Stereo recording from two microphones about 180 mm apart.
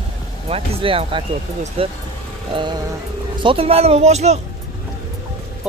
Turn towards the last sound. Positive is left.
turn(degrees=-35)  # may be behind; listen again after turning